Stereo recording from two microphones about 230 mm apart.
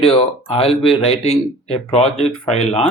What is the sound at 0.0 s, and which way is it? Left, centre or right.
Speech, left.